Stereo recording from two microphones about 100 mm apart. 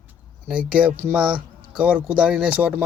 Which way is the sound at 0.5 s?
10° right (ahead or behind).